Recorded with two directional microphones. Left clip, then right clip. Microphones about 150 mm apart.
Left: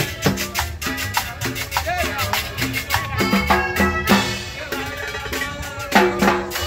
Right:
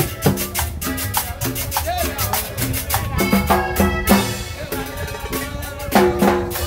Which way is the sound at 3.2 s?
30° right (ahead or behind).